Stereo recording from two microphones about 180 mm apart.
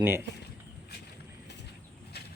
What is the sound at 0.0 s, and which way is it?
Speech, 15° right (ahead or behind).